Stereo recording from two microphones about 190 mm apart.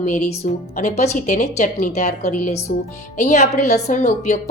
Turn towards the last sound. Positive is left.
turn(degrees=40)  # may be behind; listen again after turning